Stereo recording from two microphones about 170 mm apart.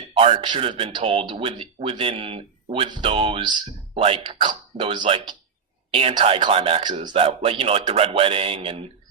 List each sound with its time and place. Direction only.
0.1 s speech: 30° right (ahead or behind)